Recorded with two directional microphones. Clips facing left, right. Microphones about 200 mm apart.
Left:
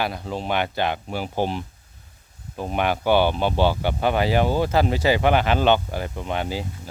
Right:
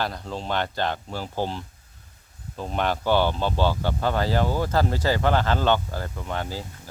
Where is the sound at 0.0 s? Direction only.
10° left (ahead or behind).